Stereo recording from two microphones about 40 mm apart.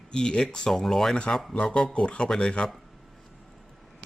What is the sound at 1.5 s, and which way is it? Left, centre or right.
Speech, left.